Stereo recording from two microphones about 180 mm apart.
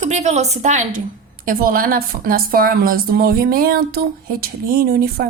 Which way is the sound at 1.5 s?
50° right (ahead or behind).